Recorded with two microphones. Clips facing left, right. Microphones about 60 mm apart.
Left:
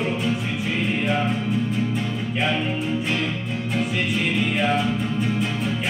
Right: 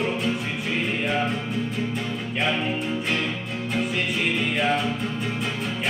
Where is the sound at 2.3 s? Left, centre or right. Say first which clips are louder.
Left 1 dB; centre.